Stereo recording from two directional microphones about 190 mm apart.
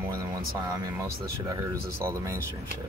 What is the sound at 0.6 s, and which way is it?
Speech, 15° right (ahead or behind).